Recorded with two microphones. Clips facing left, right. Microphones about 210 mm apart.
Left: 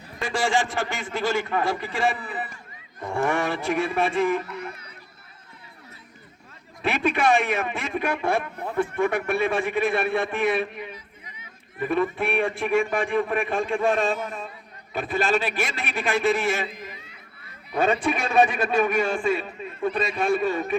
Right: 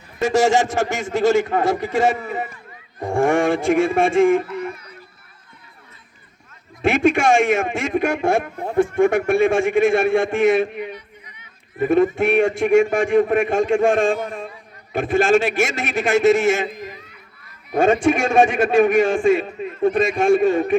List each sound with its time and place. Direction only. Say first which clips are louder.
0.2 s a man's voice: right 8 dB; 45° right (ahead or behind)
6.8 s a man's voice: right 6 dB; 45° right (ahead or behind)
11.8 s a man's voice: right 8 dB; 45° right (ahead or behind)
17.7 s a man's voice: right 7 dB; 45° right (ahead or behind)